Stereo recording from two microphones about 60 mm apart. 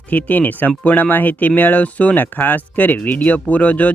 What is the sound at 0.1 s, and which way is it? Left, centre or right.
Speech, left.